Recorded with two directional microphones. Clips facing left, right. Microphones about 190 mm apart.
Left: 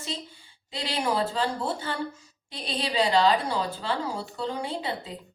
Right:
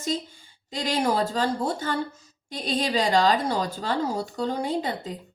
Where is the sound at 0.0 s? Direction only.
45° right (ahead or behind).